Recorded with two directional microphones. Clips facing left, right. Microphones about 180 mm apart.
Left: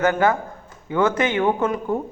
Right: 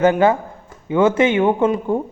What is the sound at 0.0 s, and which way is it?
A man's voice, 25° right (ahead or behind).